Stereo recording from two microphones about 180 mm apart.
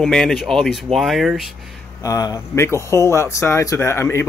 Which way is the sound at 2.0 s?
20° left (ahead or behind).